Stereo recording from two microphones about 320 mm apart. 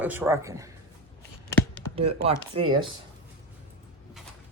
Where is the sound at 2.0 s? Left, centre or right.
Centre.